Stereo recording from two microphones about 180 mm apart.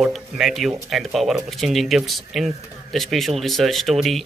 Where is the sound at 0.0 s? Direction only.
Centre (ahead or behind).